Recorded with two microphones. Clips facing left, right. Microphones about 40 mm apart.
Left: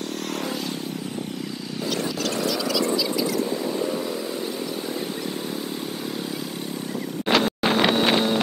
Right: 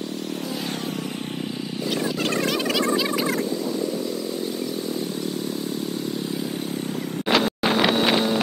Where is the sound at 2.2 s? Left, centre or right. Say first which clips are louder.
Right 2 dB; right.